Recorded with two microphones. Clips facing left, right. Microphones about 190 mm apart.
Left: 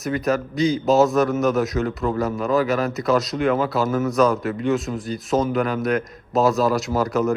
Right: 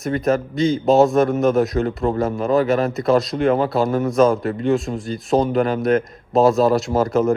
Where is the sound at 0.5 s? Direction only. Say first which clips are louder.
Right 2 dB; centre (ahead or behind).